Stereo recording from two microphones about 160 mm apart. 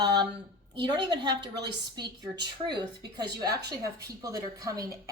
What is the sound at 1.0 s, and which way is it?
Speech, 30° right (ahead or behind).